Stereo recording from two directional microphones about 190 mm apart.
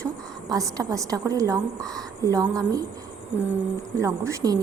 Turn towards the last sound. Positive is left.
turn(degrees=-15)  # may be behind; listen again after turning